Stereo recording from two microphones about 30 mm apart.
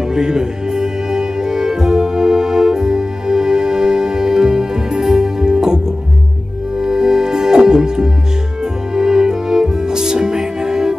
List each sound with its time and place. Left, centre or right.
0.1 s music: right
6.8 s music: centre